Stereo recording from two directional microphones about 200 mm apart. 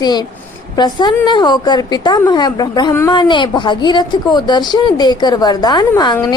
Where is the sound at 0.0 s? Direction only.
20° left (ahead or behind).